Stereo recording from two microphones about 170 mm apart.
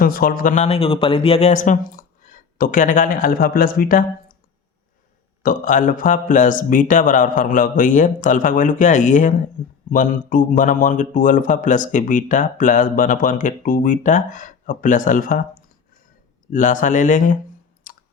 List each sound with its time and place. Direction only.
0.0 s speech: 60° left (ahead or behind)
5.4 s speech: 50° left (ahead or behind)
17.9 s clicking: 50° left (ahead or behind)